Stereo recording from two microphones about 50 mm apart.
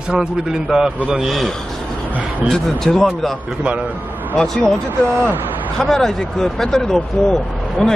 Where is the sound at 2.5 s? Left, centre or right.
Centre.